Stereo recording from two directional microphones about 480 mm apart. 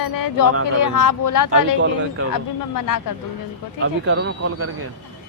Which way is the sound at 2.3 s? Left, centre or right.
Left.